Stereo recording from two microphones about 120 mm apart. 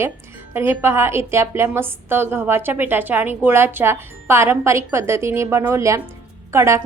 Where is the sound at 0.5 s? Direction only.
20° right (ahead or behind).